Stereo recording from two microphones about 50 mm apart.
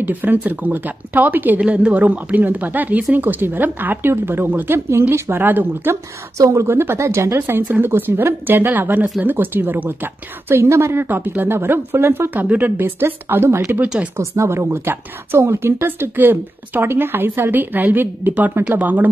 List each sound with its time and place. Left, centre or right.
0.0 s speech: right
1.6 s a woman's voice: right
4.7 s a woman's voice: right
5.3 s speech: right
6.3 s speech: right
6.7 s a woman's voice: right
7.0 s a woman's voice: right
10.6 s a woman's voice: right
11.0 s a woman's voice: right
12.4 s speech: right
12.8 s a woman's voice: right
14.1 s a woman's voice: right
16.2 s a woman's voice: right